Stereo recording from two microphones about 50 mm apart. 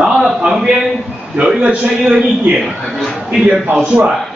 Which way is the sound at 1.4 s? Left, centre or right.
Centre.